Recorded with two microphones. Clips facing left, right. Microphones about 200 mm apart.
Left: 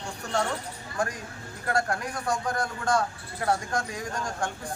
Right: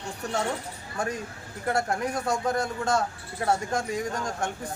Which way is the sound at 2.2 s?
25° right (ahead or behind).